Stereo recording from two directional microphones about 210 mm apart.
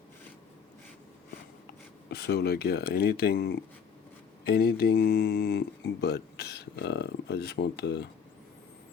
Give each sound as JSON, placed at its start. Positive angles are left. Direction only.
{"t": 2.0, "sound": "speech", "side_deg": 50}